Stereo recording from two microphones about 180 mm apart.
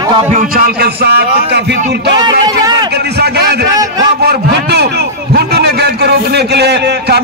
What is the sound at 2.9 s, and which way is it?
A man's voice, 65° right (ahead or behind).